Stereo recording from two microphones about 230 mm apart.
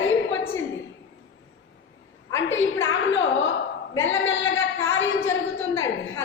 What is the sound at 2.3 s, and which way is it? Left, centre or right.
A woman's voice, left.